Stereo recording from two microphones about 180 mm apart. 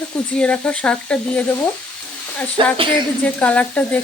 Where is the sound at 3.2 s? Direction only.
10° left (ahead or behind).